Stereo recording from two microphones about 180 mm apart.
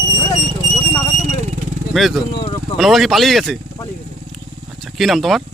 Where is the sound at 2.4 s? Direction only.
30° left (ahead or behind).